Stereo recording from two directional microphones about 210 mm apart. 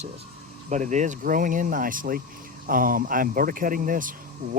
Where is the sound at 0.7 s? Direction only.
35° right (ahead or behind).